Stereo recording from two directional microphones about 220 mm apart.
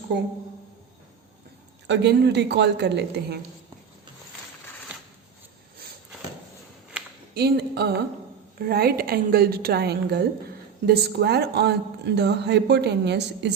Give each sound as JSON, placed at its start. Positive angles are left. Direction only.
{"t": 1.9, "sound": "a woman's voice", "side_deg": -50}
{"t": 7.3, "sound": "a woman's voice", "side_deg": -45}